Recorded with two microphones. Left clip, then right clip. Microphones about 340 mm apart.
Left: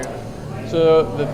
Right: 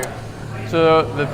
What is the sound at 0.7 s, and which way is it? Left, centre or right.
Speech, right.